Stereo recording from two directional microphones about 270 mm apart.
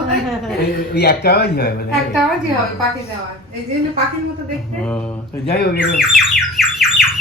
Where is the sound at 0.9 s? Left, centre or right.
Left.